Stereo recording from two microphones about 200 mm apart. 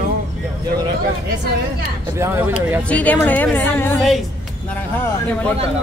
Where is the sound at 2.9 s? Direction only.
10° left (ahead or behind).